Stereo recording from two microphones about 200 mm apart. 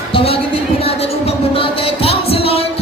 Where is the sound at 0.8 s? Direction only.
30° left (ahead or behind).